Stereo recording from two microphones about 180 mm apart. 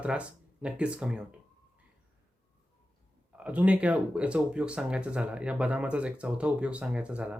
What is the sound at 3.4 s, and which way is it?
Speech, 5° right (ahead or behind).